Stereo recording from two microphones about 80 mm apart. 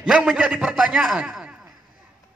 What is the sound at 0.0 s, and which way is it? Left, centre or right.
A man's voice, centre.